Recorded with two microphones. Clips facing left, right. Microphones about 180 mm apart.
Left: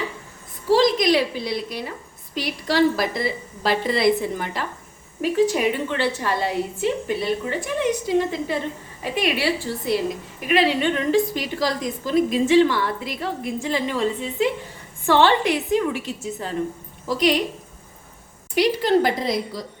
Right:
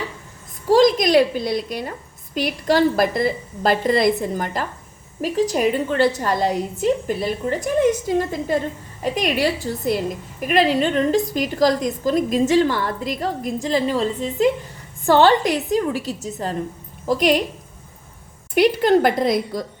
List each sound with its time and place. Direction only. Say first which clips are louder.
0.7 s a woman's voice: right 3 dB; 45° right (ahead or behind)
18.5 s a woman's voice: right 3 dB; 55° right (ahead or behind)